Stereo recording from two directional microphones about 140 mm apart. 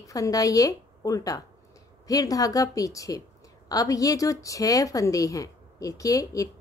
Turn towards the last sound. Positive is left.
turn(degrees=25)  # may be behind; listen again after turning